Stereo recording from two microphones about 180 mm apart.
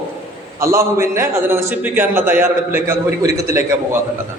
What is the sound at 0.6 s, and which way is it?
A man's voice, 15° right (ahead or behind).